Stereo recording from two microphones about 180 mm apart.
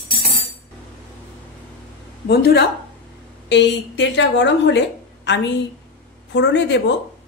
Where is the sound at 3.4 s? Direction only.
75° left (ahead or behind).